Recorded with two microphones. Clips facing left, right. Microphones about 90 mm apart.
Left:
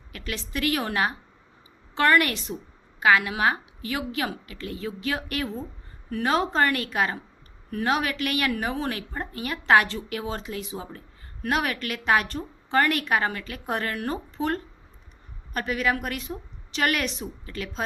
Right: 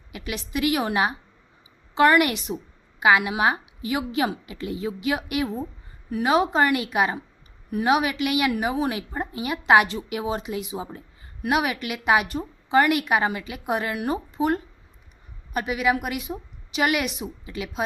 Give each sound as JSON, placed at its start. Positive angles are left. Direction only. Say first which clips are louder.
{"t": 0.1, "sound": "a woman's voice", "louder": "right 3 dB", "side_deg": -15}